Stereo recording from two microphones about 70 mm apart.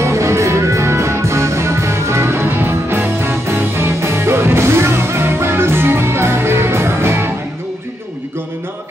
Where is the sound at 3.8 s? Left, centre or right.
Right.